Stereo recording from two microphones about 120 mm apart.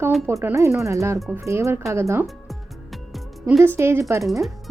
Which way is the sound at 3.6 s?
20° right (ahead or behind).